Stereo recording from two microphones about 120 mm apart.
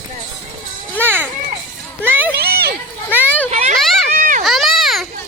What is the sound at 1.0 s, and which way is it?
A child's voice, 15° right (ahead or behind).